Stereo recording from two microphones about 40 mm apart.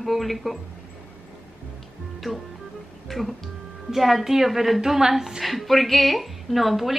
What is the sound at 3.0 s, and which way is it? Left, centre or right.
A woman's voice, centre.